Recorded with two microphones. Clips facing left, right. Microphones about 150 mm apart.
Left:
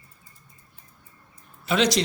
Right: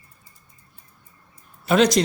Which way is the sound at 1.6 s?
45° right (ahead or behind).